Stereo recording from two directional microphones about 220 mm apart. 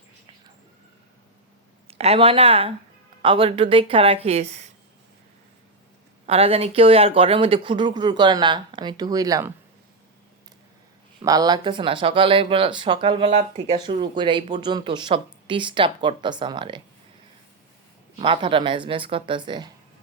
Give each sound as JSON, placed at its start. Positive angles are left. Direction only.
{"t": 1.9, "sound": "speech", "side_deg": -25}
{"t": 6.2, "sound": "speech", "side_deg": -25}
{"t": 11.2, "sound": "speech", "side_deg": -15}
{"t": 18.2, "sound": "speech", "side_deg": -25}